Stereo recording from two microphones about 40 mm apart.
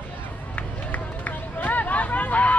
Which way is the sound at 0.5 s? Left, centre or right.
Left.